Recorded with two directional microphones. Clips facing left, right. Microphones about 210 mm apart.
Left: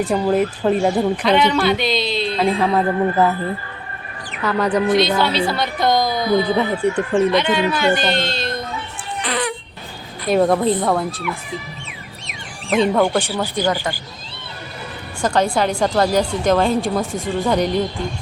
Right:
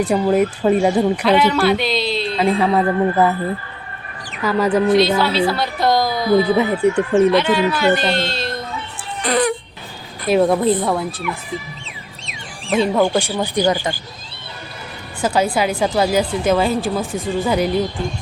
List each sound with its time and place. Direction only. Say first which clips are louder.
0.1 s speech: right 1 dB; 5° right (ahead or behind)
4.4 s speech: right 2 dB; 10° right (ahead or behind)
9.2 s music: right 6 dB; 40° right (ahead or behind)
10.2 s speech: right 1 dB; centre (ahead or behind)
12.7 s speech: even; 5° right (ahead or behind)
13.3 s speech: right 2 dB; 20° right (ahead or behind)
15.2 s speech: even; 5° right (ahead or behind)